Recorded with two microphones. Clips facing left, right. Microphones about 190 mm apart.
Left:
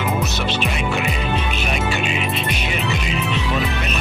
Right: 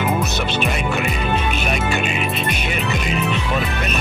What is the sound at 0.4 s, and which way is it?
Music, 50° right (ahead or behind).